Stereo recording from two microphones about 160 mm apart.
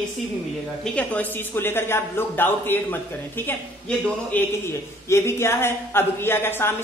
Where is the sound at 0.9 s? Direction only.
10° left (ahead or behind).